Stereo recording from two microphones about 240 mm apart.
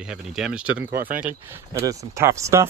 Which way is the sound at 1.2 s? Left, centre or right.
Centre.